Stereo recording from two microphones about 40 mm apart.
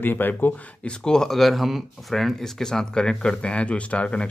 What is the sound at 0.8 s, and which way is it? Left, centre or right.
Speech, centre.